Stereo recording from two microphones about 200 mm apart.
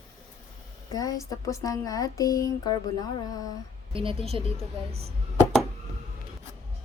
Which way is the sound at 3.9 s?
25° right (ahead or behind).